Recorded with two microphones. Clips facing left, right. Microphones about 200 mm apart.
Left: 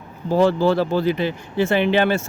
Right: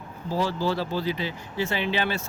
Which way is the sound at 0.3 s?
55° left (ahead or behind).